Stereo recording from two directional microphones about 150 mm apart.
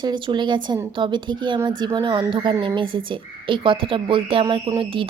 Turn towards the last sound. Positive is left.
turn(degrees=-35)  # may be behind; listen again after turning